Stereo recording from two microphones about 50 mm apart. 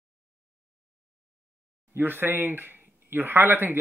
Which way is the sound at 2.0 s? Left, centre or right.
Right.